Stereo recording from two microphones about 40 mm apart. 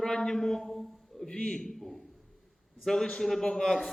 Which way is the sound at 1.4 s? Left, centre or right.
Left.